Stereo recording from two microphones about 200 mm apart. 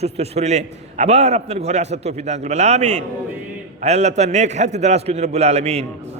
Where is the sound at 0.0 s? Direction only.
30° right (ahead or behind).